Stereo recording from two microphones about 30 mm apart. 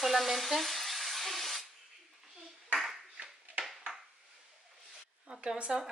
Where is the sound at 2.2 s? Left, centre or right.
Centre.